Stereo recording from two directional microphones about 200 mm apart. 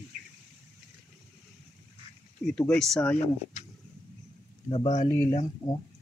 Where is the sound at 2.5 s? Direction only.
5° left (ahead or behind).